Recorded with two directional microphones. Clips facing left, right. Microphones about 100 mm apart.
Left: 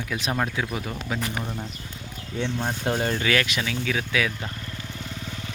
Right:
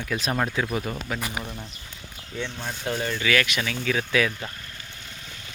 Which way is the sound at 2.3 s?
35° left (ahead or behind).